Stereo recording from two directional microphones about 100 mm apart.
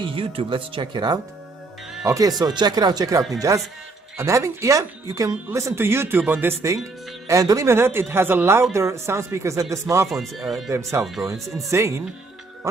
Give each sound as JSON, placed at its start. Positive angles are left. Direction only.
{"t": 0.0, "sound": "speech", "side_deg": -60}
{"t": 7.2, "sound": "speech", "side_deg": -35}
{"t": 10.0, "sound": "speech", "side_deg": 0}
{"t": 10.7, "sound": "speech", "side_deg": -30}
{"t": 11.3, "sound": "speech", "side_deg": 0}
{"t": 11.7, "sound": "speech", "side_deg": -30}